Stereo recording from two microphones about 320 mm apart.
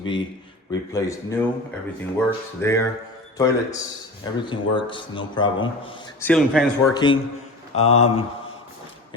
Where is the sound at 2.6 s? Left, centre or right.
Centre.